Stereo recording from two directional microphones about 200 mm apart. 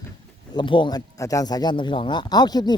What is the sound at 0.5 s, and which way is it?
Speech, 25° left (ahead or behind).